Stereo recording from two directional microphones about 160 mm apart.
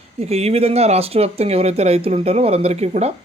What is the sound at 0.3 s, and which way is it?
Speech, 40° right (ahead or behind).